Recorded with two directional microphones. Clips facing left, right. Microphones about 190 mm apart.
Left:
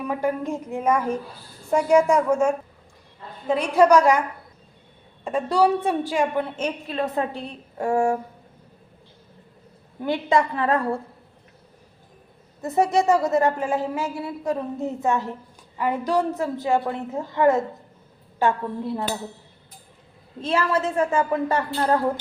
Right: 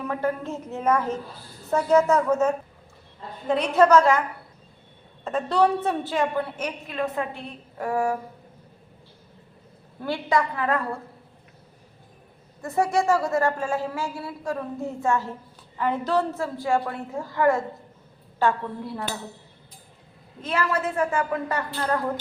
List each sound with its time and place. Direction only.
0.0 s a woman's voice: 10° left (ahead or behind)
5.2 s a woman's voice: 10° left (ahead or behind)
6.6 s a woman's voice: 30° left (ahead or behind)
10.0 s a woman's voice: 20° left (ahead or behind)
12.6 s a woman's voice: 20° left (ahead or behind)
20.4 s a woman's voice: 30° left (ahead or behind)